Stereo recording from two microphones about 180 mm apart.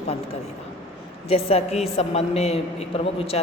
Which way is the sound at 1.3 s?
35° left (ahead or behind).